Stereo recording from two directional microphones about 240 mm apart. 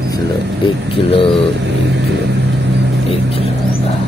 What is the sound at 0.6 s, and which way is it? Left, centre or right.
Speech, left.